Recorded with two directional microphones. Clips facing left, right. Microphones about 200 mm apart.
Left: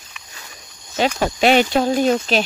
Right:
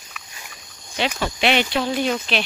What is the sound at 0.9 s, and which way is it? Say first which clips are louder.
Speech: left 5 dB; 45° left (ahead or behind).